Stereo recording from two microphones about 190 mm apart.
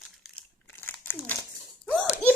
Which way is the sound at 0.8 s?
10° left (ahead or behind).